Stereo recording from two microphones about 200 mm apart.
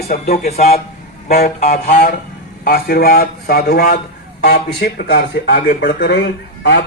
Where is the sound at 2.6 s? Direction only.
50° left (ahead or behind).